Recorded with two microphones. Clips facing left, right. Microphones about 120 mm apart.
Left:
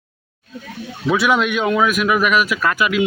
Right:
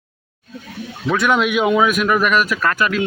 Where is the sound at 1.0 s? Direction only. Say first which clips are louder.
Even; 5° left (ahead or behind).